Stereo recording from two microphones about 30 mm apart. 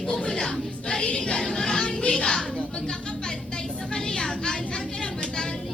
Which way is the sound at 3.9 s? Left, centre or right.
Left.